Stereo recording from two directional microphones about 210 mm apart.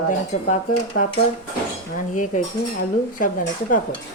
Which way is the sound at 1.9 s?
35° left (ahead or behind).